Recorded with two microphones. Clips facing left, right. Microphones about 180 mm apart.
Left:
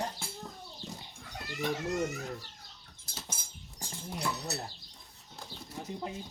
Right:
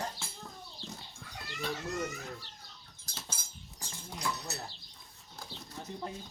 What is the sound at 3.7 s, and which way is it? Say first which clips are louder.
Speech: left 5 dB; 30° left (ahead or behind).